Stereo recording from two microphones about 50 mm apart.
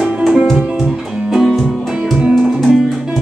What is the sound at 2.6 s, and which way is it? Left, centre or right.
Music, centre.